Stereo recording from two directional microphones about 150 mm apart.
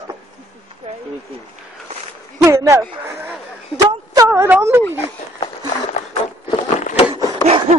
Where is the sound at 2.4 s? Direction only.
20° right (ahead or behind).